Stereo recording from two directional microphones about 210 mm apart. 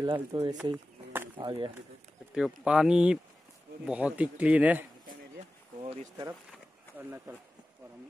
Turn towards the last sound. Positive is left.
turn(degrees=-10)  # may be behind; listen again after turning